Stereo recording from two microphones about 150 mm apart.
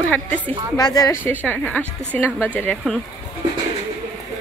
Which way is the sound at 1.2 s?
10° left (ahead or behind).